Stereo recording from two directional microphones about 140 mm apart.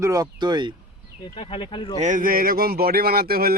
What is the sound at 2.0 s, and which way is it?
Speech, 70° right (ahead or behind).